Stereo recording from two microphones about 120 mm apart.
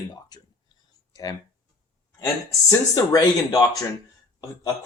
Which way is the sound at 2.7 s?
30° left (ahead or behind).